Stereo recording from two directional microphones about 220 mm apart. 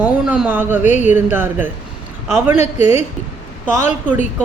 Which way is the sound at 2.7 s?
30° left (ahead or behind).